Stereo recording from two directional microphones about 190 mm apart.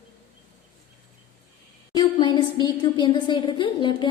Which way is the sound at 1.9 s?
25° left (ahead or behind).